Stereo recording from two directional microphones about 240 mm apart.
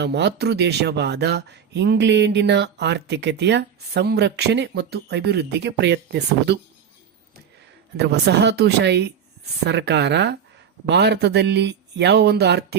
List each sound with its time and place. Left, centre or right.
0.0 s speech: right
7.9 s speech: right